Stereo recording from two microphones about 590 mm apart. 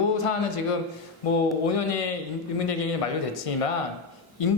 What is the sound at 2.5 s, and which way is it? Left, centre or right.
Speech, left.